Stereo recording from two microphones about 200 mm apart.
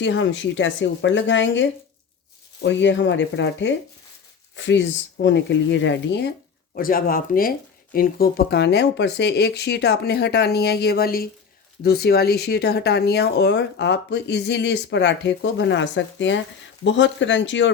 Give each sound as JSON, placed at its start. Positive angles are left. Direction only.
{"t": 0.0, "sound": "speech", "side_deg": 65}
{"t": 6.7, "sound": "speech", "side_deg": 45}